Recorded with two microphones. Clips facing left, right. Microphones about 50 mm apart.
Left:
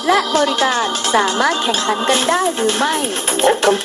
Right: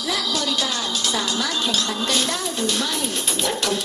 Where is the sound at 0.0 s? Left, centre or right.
Left.